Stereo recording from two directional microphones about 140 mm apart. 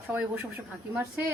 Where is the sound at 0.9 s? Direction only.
15° right (ahead or behind).